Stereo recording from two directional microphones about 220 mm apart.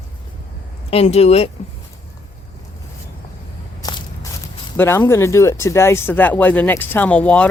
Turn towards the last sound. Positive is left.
turn(degrees=5)  # may be behind; listen again after turning